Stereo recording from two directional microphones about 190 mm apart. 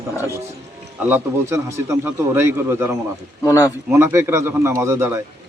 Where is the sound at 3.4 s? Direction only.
15° left (ahead or behind).